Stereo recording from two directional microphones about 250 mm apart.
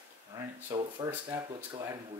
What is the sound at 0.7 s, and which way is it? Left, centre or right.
Speech, centre.